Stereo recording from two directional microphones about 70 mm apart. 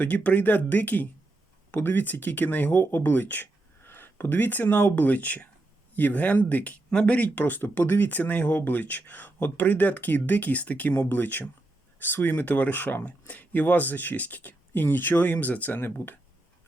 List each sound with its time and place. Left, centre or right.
0.0 s speech: left